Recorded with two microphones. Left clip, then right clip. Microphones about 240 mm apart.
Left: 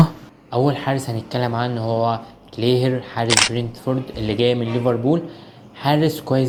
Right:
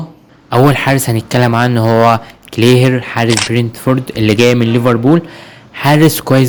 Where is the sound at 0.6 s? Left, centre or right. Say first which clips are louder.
Right 10 dB; right.